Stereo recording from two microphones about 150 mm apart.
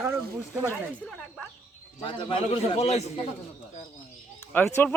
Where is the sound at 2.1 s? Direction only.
35° left (ahead or behind).